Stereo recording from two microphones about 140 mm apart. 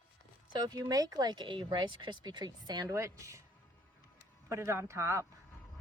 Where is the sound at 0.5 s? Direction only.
30° right (ahead or behind).